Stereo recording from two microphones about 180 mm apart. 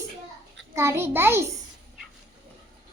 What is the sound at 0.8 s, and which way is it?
Speech, 15° right (ahead or behind).